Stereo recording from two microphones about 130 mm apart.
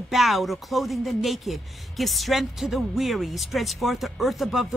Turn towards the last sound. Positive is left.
turn(degrees=0)  # may be behind; listen again after turning